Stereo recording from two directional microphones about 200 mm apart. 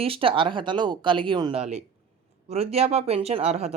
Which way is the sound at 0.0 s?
25° right (ahead or behind).